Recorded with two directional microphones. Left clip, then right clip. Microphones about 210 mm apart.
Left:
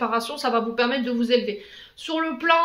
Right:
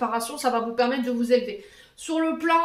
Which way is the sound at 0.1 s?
35° left (ahead or behind).